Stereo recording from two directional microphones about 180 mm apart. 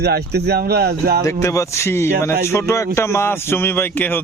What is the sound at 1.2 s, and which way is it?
Speech, 15° left (ahead or behind).